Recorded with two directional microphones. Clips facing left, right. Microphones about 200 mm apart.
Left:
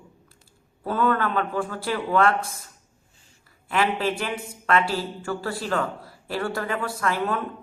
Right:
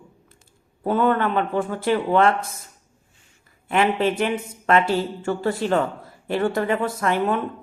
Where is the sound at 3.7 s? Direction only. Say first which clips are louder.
Right 4 dB; 30° right (ahead or behind).